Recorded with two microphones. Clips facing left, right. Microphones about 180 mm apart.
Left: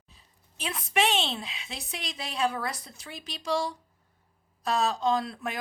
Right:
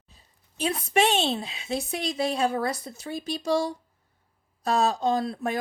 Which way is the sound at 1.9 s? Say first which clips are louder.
Right 10 dB; 45° right (ahead or behind).